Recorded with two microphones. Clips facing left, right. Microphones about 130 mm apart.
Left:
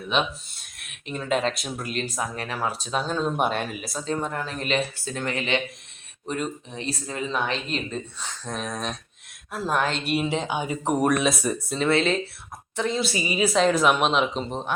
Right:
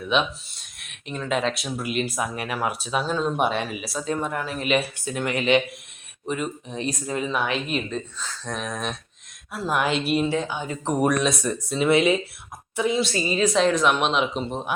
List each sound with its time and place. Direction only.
1.0 s speech: centre (ahead or behind)
4.1 s speech: 15° right (ahead or behind)
6.7 s speech: 15° right (ahead or behind)
7.9 s speech: 5° left (ahead or behind)
10.2 s speech: 20° left (ahead or behind)
11.8 s speech: 15° right (ahead or behind)
13.1 s speech: 15° left (ahead or behind); by 14.7 s 5° right (ahead or behind)